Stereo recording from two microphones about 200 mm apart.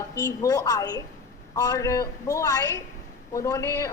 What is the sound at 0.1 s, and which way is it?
A woman's voice, 15° left (ahead or behind).